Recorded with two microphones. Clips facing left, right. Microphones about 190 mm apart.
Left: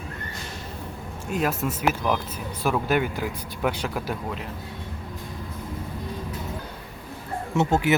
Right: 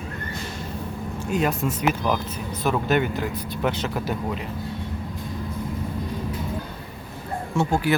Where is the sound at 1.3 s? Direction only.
Centre (ahead or behind).